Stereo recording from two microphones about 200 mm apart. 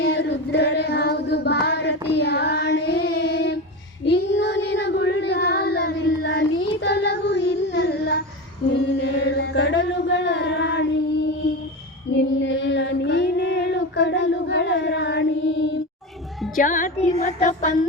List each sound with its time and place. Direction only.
0.0 s child singing: 60° left (ahead or behind)
9.0 s chant: 60° left (ahead or behind)
12.1 s female singing: 60° left (ahead or behind)
16.6 s music: 40° left (ahead or behind)
17.2 s child singing: 40° left (ahead or behind)